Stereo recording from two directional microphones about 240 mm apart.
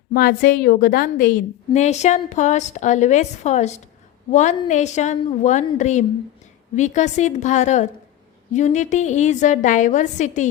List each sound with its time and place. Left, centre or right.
0.1 s a woman's voice: left